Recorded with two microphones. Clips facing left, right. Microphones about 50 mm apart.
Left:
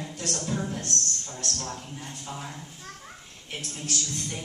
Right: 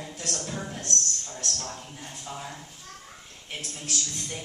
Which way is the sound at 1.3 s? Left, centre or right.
Centre.